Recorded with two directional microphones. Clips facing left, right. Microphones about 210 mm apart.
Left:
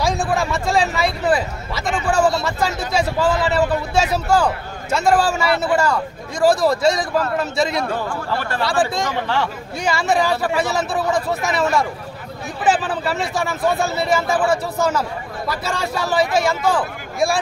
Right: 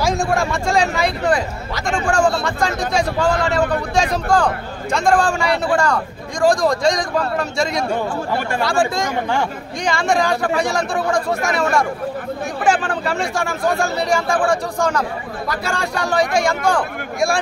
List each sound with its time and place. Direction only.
0.0 s a man's voice: centre (ahead or behind)
7.9 s speech: 15° right (ahead or behind)
8.6 s speech: centre (ahead or behind)